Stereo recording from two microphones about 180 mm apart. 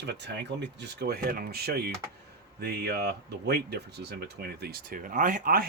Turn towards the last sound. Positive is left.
turn(degrees=-50)  # may be behind; listen again after turning